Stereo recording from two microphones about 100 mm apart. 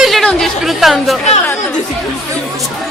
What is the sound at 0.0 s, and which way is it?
Chatter, centre (ahead or behind).